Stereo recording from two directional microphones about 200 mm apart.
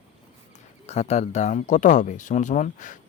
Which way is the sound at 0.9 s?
35° left (ahead or behind).